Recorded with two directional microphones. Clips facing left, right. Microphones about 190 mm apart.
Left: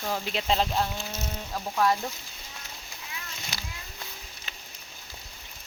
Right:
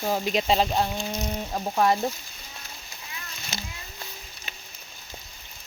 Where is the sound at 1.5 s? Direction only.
25° right (ahead or behind).